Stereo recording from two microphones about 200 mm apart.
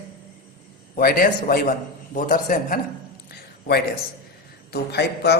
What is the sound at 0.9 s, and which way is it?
A man's voice, 45° left (ahead or behind).